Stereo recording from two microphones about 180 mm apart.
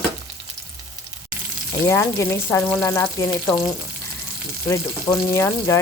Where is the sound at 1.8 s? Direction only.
15° left (ahead or behind).